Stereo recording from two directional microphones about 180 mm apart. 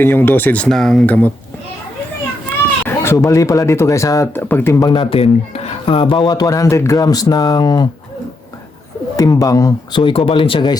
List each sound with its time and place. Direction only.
0.0 s speech: 10° left (ahead or behind)
2.8 s speech: 15° left (ahead or behind)
4.9 s speech: 30° left (ahead or behind)
9.1 s speech: 20° left (ahead or behind)